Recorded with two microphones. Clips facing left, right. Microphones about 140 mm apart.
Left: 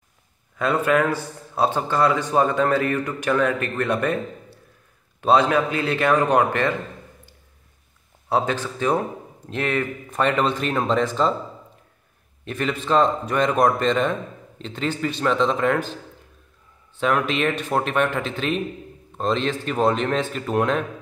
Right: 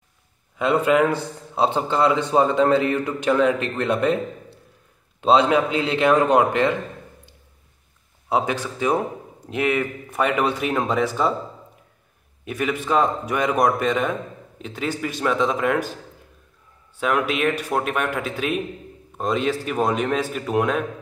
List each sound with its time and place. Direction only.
0.6 s a man's voice: 20° right (ahead or behind)
8.3 s a man's voice: 15° right (ahead or behind)
12.4 s a man's voice: 10° right (ahead or behind)